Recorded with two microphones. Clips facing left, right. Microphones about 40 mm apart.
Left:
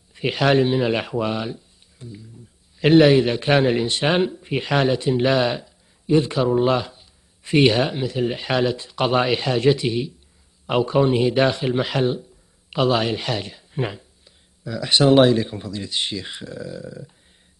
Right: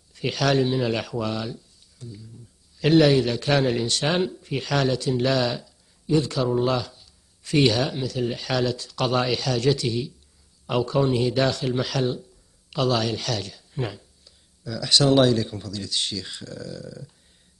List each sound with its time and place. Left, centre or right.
0.1 s a man's voice: left